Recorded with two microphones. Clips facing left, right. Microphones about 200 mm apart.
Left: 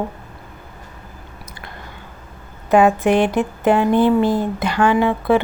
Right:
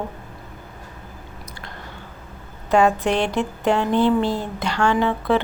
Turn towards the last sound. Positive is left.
turn(degrees=15)  # may be behind; listen again after turning